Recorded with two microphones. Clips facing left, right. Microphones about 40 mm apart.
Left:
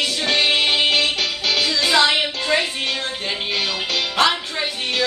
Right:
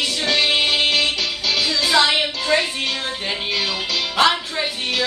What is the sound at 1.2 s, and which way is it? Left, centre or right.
Music, left.